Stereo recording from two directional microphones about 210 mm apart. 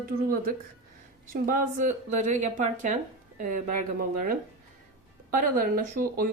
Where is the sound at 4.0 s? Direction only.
45° right (ahead or behind).